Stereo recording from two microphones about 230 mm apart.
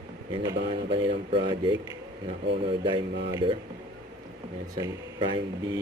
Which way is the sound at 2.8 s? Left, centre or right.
Centre.